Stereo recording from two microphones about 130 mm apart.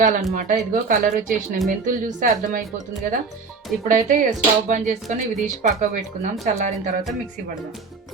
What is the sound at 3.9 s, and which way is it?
Speech, 90° right.